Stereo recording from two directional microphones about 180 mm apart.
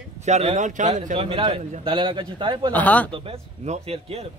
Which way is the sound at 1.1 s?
30° right (ahead or behind).